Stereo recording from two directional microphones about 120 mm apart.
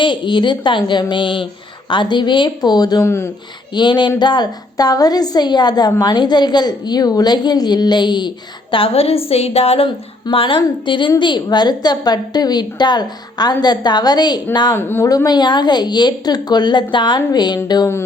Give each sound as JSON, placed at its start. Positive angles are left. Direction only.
{"t": 0.0, "sound": "a woman's voice", "side_deg": 40}
{"t": 3.0, "sound": "speech", "side_deg": 20}
{"t": 3.8, "sound": "a woman's voice", "side_deg": 40}
{"t": 8.7, "sound": "a woman's voice", "side_deg": 50}
{"t": 14.8, "sound": "speech", "side_deg": 20}
{"t": 15.1, "sound": "a woman's voice", "side_deg": 35}